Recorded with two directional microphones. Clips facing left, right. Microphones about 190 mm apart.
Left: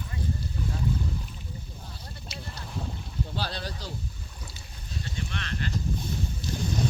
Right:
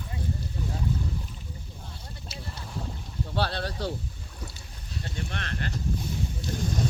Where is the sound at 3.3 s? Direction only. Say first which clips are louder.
Right 8 dB; 65° right (ahead or behind).